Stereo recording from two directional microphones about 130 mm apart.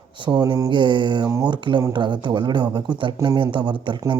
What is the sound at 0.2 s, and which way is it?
Speech, 35° right (ahead or behind).